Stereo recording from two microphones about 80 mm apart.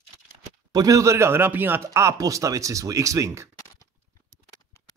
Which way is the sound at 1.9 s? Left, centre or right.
Right.